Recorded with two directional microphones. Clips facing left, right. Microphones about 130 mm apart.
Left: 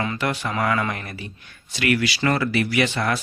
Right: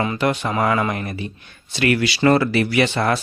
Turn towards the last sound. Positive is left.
turn(degrees=-30)  # may be behind; listen again after turning